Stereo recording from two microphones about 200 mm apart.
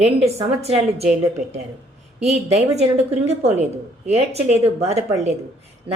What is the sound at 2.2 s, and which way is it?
A woman's voice, 35° right (ahead or behind).